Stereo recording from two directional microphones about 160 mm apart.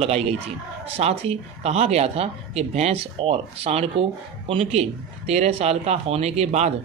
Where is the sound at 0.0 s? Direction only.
40° right (ahead or behind).